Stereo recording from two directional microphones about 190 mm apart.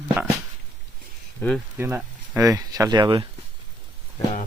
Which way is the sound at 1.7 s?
15° right (ahead or behind).